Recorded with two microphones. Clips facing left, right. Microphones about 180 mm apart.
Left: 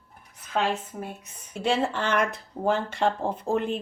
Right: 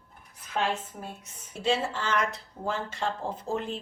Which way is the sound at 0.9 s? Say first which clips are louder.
Left 5 dB; 60° left (ahead or behind).